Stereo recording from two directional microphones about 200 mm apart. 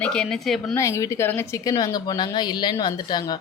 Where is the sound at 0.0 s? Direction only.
5° left (ahead or behind).